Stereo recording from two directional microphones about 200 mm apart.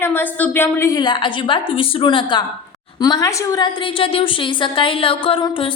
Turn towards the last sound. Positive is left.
turn(degrees=25)  # may be behind; listen again after turning